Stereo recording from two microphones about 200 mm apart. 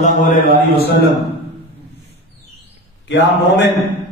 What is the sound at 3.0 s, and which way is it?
Speech, 60° left (ahead or behind).